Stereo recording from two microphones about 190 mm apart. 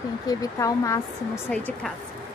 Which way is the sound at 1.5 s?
5° left (ahead or behind).